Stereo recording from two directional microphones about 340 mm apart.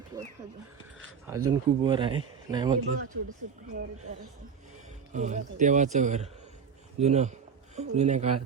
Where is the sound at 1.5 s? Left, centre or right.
Centre.